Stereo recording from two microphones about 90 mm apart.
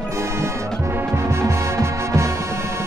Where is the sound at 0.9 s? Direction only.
30° right (ahead or behind).